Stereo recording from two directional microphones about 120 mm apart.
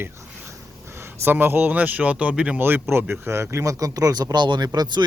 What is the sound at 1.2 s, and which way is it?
Speech, 15° right (ahead or behind).